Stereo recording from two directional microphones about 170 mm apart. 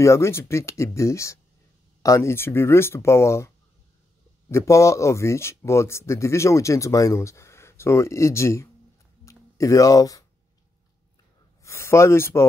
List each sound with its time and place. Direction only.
0.0 s speech: 15° left (ahead or behind)
9.2 s a sound: 20° left (ahead or behind)
11.6 s speech: 15° left (ahead or behind)